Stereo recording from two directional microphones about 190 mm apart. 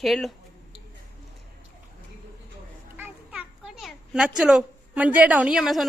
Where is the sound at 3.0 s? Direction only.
10° right (ahead or behind).